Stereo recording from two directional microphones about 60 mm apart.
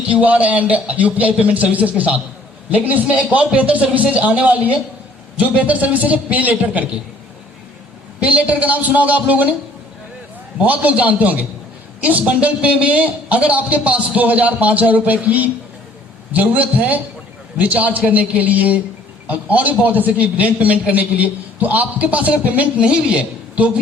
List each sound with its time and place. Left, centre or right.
0.0 s a man's voice: right
8.2 s a man's voice: right
10.6 s a man's voice: right